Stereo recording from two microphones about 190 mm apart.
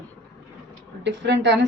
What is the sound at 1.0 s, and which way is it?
Speech, 65° right (ahead or behind).